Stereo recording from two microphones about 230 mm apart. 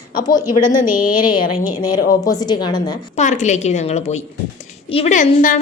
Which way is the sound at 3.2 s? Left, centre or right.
Left.